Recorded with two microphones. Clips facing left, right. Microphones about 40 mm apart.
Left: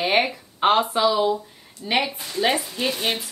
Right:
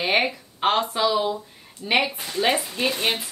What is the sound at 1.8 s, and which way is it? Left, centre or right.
Speech, centre.